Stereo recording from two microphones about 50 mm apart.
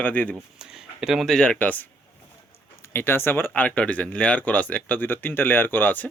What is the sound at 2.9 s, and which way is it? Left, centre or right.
Speech, left.